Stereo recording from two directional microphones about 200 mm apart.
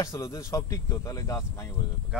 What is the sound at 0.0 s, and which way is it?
Speech, 15° left (ahead or behind).